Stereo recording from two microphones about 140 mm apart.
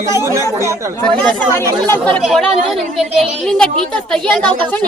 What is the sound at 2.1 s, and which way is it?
A woman's voice, 5° left (ahead or behind).